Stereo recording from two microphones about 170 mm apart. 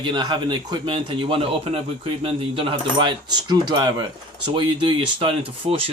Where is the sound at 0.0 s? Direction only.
25° right (ahead or behind).